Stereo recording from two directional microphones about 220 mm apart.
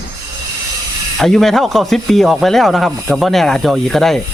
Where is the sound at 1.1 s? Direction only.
Centre (ahead or behind).